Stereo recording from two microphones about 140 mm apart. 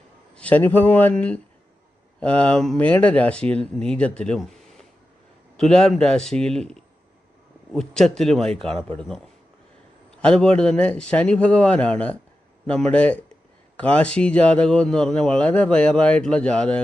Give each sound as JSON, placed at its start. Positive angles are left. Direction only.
{"t": 0.3, "sound": "speech", "side_deg": 10}